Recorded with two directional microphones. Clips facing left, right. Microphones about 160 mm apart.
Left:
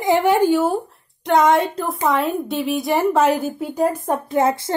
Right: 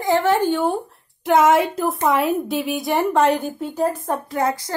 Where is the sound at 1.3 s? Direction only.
5° right (ahead or behind).